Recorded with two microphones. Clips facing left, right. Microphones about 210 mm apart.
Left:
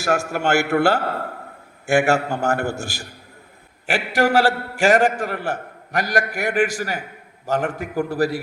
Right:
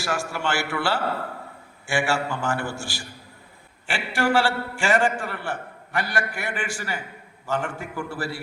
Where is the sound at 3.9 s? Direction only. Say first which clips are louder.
Left 4 dB; 40° left (ahead or behind).